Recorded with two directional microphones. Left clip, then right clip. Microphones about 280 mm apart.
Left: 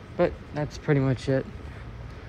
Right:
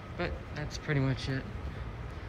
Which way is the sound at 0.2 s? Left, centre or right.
Centre.